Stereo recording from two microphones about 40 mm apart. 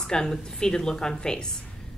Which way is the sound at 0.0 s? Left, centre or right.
Centre.